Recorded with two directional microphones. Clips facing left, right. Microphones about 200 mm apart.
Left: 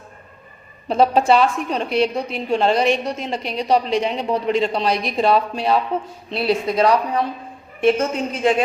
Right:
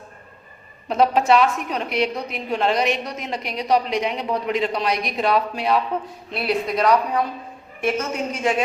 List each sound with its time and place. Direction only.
0.9 s a woman's voice: 30° left (ahead or behind)